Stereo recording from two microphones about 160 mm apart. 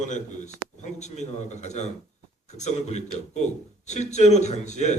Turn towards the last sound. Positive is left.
turn(degrees=45)  # may be behind; listen again after turning